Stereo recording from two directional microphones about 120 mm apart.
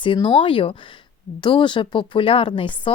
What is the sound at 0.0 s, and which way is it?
Speech, 45° left (ahead or behind).